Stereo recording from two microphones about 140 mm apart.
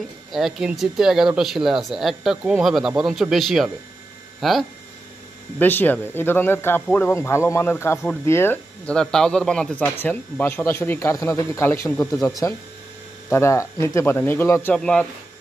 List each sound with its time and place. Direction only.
0.3 s speech: centre (ahead or behind)
5.6 s speech: 15° left (ahead or behind)
14.8 s speech: 5° left (ahead or behind)